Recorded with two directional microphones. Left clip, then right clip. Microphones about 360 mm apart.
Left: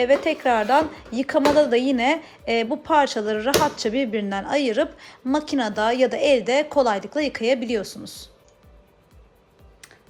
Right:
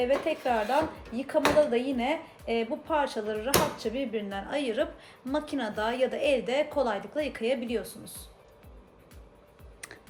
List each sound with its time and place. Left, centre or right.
0.0 s a woman's voice: left